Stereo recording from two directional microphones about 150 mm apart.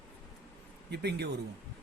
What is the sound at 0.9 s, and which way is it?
Speech, 90° right.